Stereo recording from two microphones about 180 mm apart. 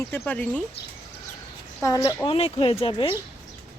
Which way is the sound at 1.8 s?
20° left (ahead or behind).